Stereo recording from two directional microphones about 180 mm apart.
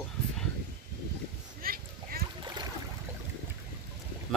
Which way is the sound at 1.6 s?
55° right (ahead or behind).